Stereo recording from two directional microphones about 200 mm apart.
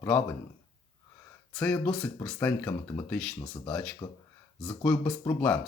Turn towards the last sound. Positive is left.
turn(degrees=10)  # may be behind; listen again after turning